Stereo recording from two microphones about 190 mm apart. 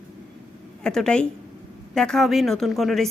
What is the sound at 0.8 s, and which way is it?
A woman's voice, 5° left (ahead or behind).